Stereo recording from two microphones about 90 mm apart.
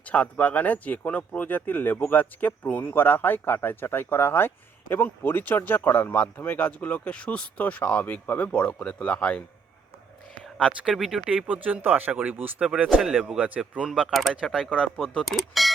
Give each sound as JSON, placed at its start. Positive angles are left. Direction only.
{"t": 0.0, "sound": "speech", "side_deg": 15}
{"t": 10.6, "sound": "speech", "side_deg": -10}
{"t": 14.7, "sound": "speech", "side_deg": 15}
{"t": 15.0, "sound": "speech", "side_deg": 0}